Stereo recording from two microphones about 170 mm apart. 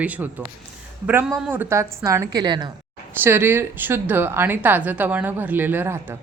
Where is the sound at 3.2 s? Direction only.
15° right (ahead or behind).